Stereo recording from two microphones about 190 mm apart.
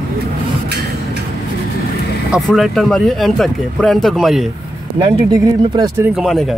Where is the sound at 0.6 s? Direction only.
55° right (ahead or behind).